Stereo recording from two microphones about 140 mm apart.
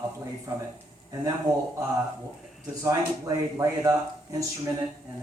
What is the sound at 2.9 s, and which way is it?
Speech, 20° right (ahead or behind).